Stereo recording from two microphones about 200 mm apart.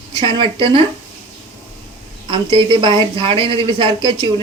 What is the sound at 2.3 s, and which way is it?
Speech, 25° right (ahead or behind).